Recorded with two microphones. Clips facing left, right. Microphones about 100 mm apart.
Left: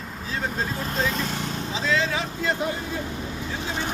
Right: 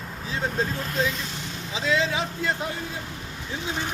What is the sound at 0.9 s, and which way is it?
Speech, 35° left (ahead or behind).